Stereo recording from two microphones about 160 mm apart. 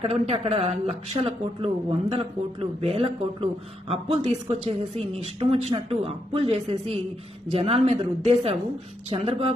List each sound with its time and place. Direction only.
0.0 s a woman's voice: 35° right (ahead or behind)